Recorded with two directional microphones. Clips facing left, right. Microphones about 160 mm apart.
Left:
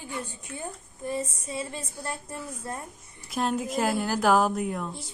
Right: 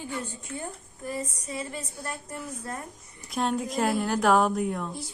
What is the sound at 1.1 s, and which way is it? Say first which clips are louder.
A woman's voice: left 2 dB; 25° left (ahead or behind).